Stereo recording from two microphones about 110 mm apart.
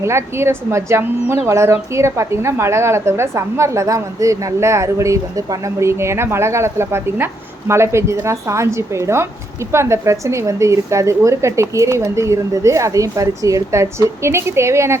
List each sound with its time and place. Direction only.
0.0 s a woman's voice: 25° right (ahead or behind)